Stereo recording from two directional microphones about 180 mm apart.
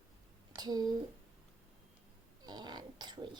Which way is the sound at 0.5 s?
20° right (ahead or behind).